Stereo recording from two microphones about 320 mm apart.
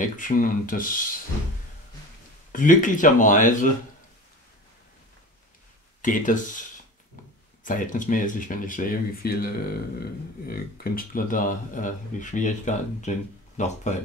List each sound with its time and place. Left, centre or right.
0.0 s speech: left
2.5 s speech: left
6.0 s speech: left
7.6 s speech: left